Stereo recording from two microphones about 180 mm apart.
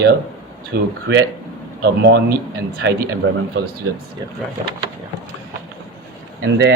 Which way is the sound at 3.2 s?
80° right.